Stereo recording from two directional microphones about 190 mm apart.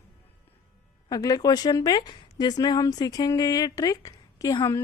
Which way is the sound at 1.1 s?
20° left (ahead or behind).